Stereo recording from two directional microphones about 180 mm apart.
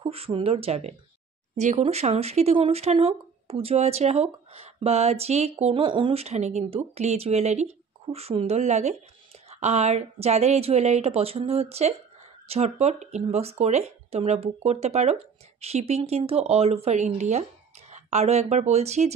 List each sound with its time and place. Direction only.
0.0 s speech: 30° right (ahead or behind)